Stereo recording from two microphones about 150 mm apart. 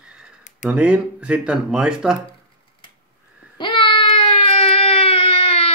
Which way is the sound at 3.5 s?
35° left (ahead or behind).